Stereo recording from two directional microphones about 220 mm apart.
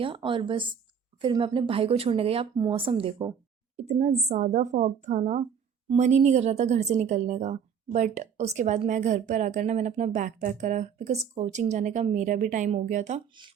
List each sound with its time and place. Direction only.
0.0 s a woman's voice: 25° right (ahead or behind)